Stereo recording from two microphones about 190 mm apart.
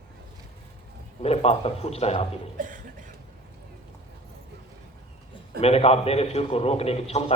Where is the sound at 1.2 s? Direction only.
35° left (ahead or behind).